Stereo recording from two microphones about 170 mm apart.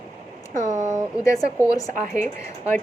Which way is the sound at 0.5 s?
45° right (ahead or behind).